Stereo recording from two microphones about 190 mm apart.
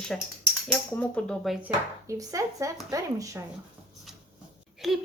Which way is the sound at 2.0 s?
15° right (ahead or behind).